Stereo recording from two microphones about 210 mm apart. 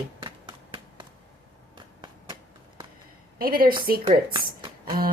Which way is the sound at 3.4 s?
45° right (ahead or behind).